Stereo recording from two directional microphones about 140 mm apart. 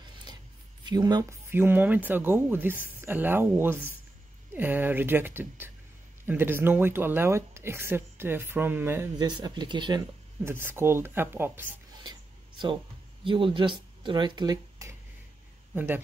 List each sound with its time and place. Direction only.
0.8 s speech: 30° right (ahead or behind)
1.5 s speech: 15° right (ahead or behind)
9.2 s speech: 30° right (ahead or behind)
10.4 s speech: 15° right (ahead or behind)
12.0 s writing: 35° right (ahead or behind)
13.2 s speech: 35° right (ahead or behind); by 16.0 s 15° right (ahead or behind)